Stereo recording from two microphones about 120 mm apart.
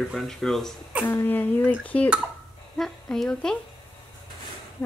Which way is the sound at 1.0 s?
15° left (ahead or behind).